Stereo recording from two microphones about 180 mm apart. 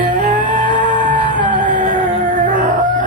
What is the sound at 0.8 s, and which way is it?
Music, 45° right (ahead or behind).